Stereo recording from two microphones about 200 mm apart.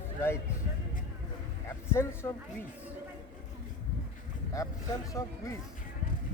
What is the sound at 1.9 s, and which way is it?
Speech, 15° left (ahead or behind).